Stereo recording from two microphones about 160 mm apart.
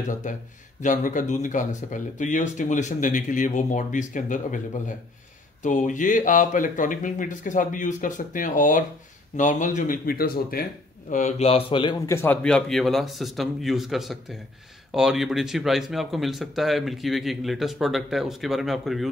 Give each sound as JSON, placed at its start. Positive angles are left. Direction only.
{"t": 0.0, "sound": "speech", "side_deg": 50}
{"t": 12.1, "sound": "speech", "side_deg": 15}